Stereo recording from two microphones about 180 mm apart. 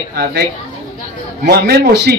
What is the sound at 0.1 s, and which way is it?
Speech, 60° right (ahead or behind).